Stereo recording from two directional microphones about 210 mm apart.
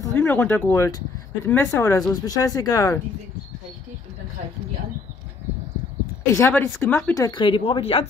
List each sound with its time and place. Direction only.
0.0 s speech: 15° left (ahead or behind)
6.3 s speech: 10° left (ahead or behind); by 8.1 s 25° left (ahead or behind)